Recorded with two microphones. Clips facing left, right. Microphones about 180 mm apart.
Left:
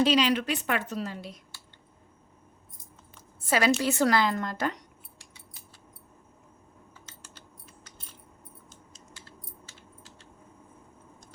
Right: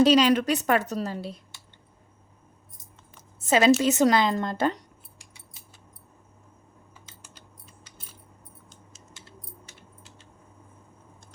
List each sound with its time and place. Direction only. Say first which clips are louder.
0.0 s a woman's voice: right 5 dB; 40° right (ahead or behind)
3.4 s a woman's voice: right 5 dB; 20° right (ahead or behind)
7.9 s coin: even; 5° right (ahead or behind)
9.6 s a sound: even; 20° right (ahead or behind)